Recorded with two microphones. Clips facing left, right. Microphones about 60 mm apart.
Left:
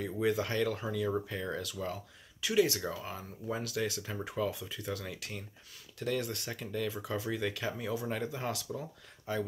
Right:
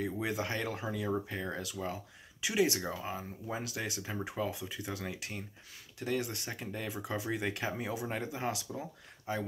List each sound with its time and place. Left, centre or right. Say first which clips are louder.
0.0 s speech: left 3 dB; centre